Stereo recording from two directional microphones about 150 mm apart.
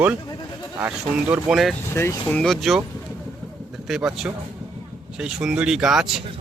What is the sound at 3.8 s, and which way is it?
Speech, 5° right (ahead or behind).